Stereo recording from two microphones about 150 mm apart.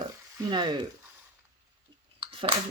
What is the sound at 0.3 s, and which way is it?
Speech, 30° right (ahead or behind).